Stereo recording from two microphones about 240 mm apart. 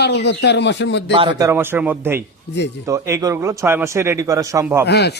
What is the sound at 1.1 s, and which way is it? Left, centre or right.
Speech, centre.